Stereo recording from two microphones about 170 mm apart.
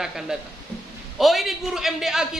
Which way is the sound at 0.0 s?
Centre (ahead or behind).